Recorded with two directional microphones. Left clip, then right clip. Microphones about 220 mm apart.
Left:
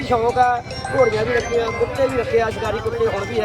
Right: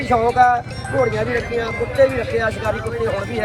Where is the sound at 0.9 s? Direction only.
25° left (ahead or behind).